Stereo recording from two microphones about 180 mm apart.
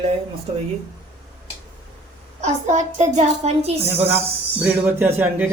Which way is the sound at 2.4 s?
40° right (ahead or behind).